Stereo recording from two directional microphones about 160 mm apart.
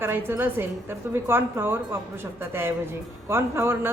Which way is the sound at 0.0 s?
15° right (ahead or behind).